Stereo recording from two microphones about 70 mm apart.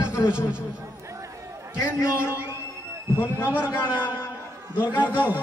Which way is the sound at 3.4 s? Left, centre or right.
Right.